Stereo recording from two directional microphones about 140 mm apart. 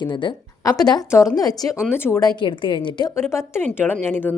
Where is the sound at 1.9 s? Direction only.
15° left (ahead or behind).